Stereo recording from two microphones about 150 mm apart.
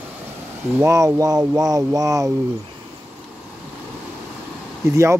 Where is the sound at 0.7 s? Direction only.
20° right (ahead or behind).